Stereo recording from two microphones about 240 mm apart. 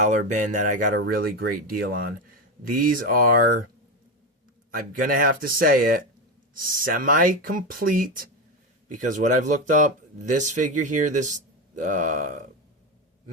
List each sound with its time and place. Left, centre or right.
0.0 s speech: right
5.0 s speech: right